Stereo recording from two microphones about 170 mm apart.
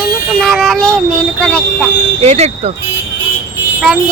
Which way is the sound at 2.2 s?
40° right (ahead or behind).